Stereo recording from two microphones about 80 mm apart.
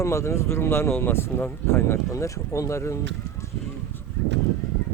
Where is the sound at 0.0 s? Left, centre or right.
Left.